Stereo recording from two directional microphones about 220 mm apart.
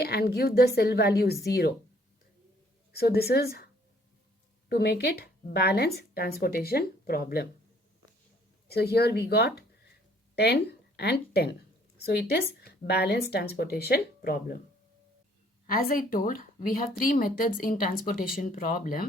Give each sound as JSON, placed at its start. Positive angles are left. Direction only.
{"t": 0.0, "sound": "speech", "side_deg": 45}
{"t": 2.9, "sound": "speech", "side_deg": 45}
{"t": 4.7, "sound": "speech", "side_deg": 45}
{"t": 8.6, "sound": "speech", "side_deg": 45}
{"t": 15.6, "sound": "a woman's voice", "side_deg": 40}